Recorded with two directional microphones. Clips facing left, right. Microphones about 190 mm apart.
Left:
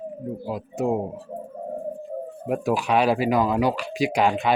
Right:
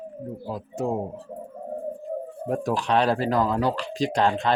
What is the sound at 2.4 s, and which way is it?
Speech, 10° left (ahead or behind).